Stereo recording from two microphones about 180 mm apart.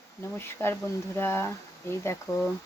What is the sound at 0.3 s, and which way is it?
Speech, 15° left (ahead or behind).